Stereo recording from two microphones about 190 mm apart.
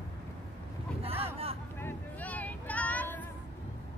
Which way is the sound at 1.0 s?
30° right (ahead or behind).